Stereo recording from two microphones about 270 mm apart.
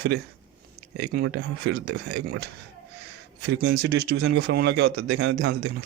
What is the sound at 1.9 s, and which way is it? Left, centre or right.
Speech, right.